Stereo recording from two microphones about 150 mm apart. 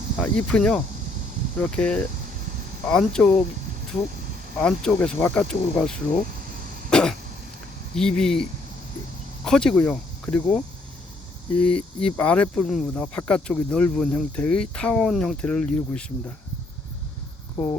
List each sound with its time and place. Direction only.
0.2 s speech: 5° left (ahead or behind)
4.6 s speech: 5° left (ahead or behind)
6.9 s cough: 5° left (ahead or behind)
7.9 s speech: 5° left (ahead or behind)
17.6 s speech: 15° left (ahead or behind)